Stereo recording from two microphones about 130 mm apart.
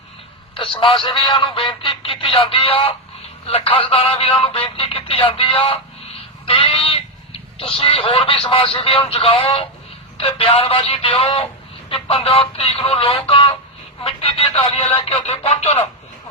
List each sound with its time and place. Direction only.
0.5 s speech: 40° left (ahead or behind)